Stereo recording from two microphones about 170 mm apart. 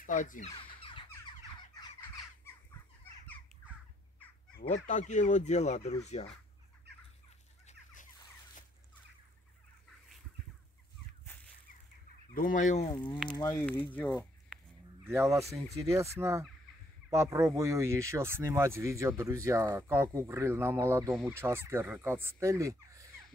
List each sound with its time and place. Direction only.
0.0 s speech: 50° left (ahead or behind)
0.6 s a sound: 30° left (ahead or behind)
4.6 s speech: 45° left (ahead or behind)
7.6 s chicken: 50° left (ahead or behind)
12.4 s speech: 50° left (ahead or behind)
12.9 s speech: 30° left (ahead or behind)
13.7 s speech: 10° left (ahead or behind)
15.1 s speech: 15° right (ahead or behind)